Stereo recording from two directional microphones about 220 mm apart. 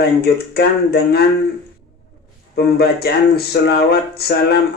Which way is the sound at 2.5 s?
45° left (ahead or behind).